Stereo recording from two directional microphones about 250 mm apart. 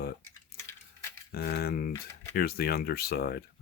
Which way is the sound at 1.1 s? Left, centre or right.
Left.